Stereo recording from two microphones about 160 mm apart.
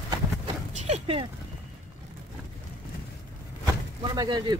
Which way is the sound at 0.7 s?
45° right (ahead or behind).